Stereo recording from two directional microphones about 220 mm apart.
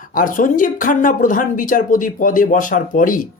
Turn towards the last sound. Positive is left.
turn(degrees=40)  # may be behind; listen again after turning